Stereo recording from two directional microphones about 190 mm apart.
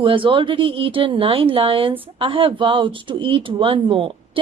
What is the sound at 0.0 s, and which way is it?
Speech, 25° right (ahead or behind).